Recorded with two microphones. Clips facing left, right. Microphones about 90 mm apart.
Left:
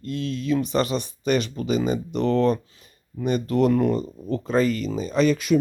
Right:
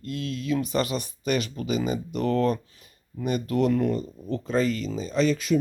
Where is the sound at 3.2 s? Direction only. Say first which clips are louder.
Left 3 dB; 35° left (ahead or behind).